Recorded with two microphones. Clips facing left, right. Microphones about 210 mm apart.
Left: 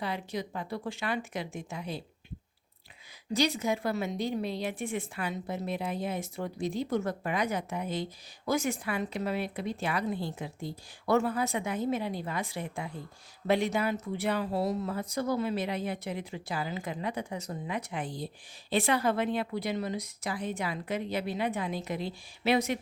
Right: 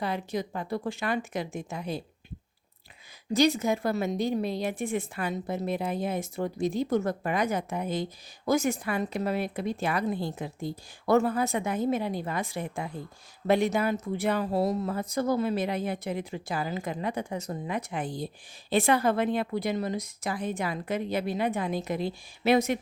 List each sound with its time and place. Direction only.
0.0 s speech: 45° right (ahead or behind)
3.3 s speech: 45° right (ahead or behind)